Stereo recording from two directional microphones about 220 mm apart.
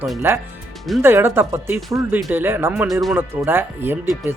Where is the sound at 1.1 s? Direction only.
10° right (ahead or behind).